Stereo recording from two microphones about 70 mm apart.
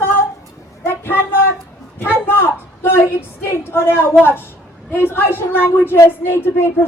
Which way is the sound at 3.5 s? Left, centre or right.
Left.